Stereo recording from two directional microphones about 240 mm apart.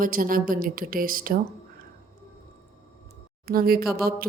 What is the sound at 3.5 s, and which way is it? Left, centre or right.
Speech, right.